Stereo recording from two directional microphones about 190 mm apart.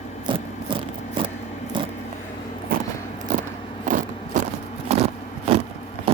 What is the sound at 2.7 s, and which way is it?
Vehicle, 50° right (ahead or behind).